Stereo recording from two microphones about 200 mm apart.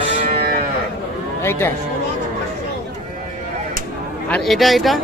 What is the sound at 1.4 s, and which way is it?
Speech, 10° left (ahead or behind).